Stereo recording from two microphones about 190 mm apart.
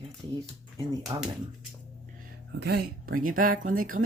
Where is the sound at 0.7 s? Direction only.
20° right (ahead or behind).